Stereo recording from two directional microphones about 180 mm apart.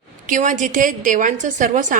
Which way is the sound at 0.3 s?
45° right (ahead or behind).